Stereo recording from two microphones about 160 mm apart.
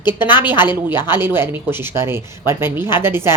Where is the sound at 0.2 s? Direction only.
30° left (ahead or behind).